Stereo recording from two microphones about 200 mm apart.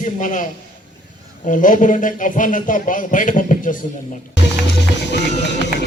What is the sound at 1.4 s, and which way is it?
A man's voice, 40° left (ahead or behind).